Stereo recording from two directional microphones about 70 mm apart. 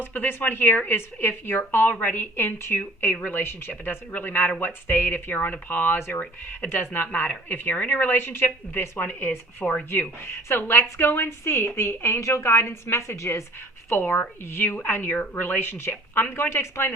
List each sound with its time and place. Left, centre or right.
0.0 s a woman's voice: left
13.9 s a woman's voice: left